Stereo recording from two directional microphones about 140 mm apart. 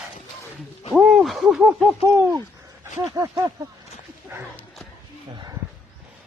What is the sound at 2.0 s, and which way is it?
Speech, 20° right (ahead or behind).